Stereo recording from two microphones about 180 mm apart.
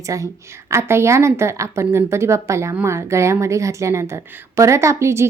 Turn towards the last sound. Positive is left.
turn(degrees=-15)  # may be behind; listen again after turning